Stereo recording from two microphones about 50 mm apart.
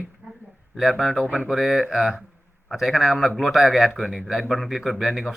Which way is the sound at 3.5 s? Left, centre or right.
Centre.